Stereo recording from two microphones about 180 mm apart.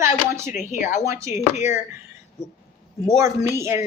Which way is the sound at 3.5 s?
15° right (ahead or behind).